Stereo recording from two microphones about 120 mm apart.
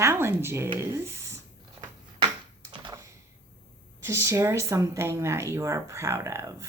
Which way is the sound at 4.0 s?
25° right (ahead or behind).